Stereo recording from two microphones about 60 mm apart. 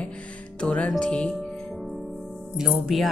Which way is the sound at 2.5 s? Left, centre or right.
Centre.